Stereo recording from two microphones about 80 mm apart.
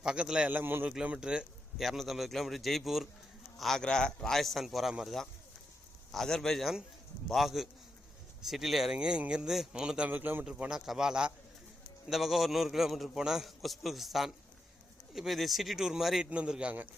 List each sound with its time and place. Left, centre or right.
0.0 s speech: centre
0.5 s speech: right
0.9 s speech: centre
1.8 s a man's voice: centre
10.1 s speech: right
10.4 s a man's voice: centre
16.3 s speech: centre